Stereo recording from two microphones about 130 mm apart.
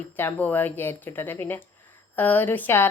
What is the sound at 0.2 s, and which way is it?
A woman's voice, 15° left (ahead or behind).